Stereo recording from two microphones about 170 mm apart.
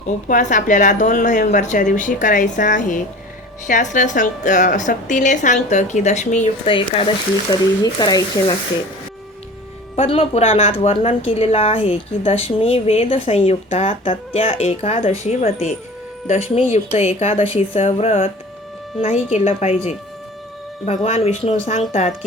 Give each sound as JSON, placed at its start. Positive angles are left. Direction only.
{"t": 0.3, "sound": "a woman's voice", "side_deg": 50}
{"t": 6.7, "sound": "a woman's voice", "side_deg": 30}
{"t": 9.9, "sound": "a woman's voice", "side_deg": 35}
{"t": 20.8, "sound": "a woman's voice", "side_deg": 40}